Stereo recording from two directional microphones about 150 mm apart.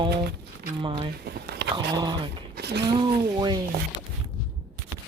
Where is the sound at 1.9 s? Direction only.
30° right (ahead or behind).